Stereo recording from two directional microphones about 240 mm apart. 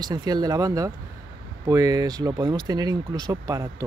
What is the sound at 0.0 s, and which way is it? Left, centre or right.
Speech, centre.